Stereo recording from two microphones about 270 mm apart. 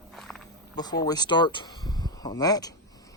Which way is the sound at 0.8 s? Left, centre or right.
Centre.